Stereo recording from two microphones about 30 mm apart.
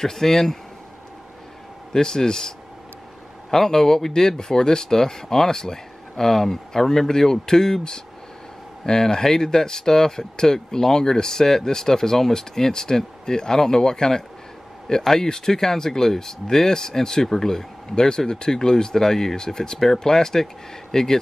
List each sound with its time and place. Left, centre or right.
0.0 s speech: centre
2.0 s speech: left
9.0 s speech: centre
17.9 s speech: left